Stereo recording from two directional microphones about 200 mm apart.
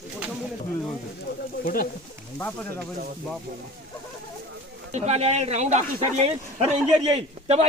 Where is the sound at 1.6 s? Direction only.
45° left (ahead or behind).